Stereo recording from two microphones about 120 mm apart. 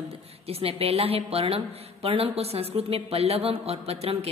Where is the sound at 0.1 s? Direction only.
55° right (ahead or behind).